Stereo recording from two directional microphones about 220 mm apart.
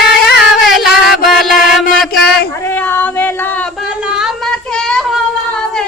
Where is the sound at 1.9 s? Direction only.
Centre (ahead or behind).